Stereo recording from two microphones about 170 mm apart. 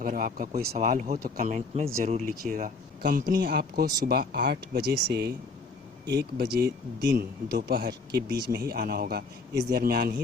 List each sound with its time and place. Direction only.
0.0 s speech: 60° right (ahead or behind); by 2.3 s 40° right (ahead or behind)
2.3 s speech: 60° right (ahead or behind)
3.3 s speech: 65° right (ahead or behind)